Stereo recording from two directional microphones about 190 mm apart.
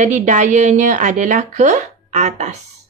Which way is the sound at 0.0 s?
40° right (ahead or behind).